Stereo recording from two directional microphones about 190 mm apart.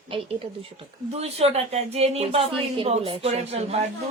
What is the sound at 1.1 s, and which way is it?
Speech, 35° right (ahead or behind).